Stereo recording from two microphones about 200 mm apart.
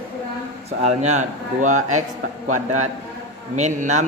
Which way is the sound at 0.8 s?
35° right (ahead or behind).